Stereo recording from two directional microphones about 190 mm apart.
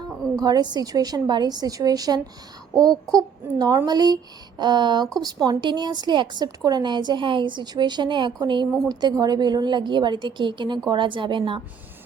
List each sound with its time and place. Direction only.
0.3 s speech: 20° right (ahead or behind)